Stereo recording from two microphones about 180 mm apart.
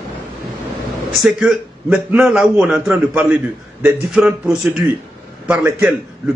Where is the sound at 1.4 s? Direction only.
5° right (ahead or behind).